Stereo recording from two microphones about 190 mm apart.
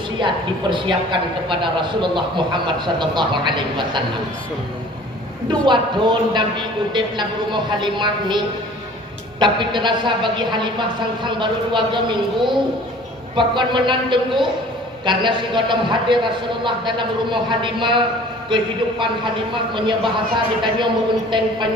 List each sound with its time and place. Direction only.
0.2 s a man's voice: 25° right (ahead or behind)
5.5 s a man's voice: 25° right (ahead or behind)
9.4 s a man's voice: 25° right (ahead or behind)
20.3 s a man's voice: 25° right (ahead or behind)